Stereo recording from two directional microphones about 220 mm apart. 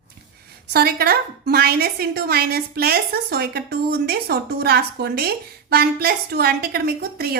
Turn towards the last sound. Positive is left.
turn(degrees=-45)  # may be behind; listen again after turning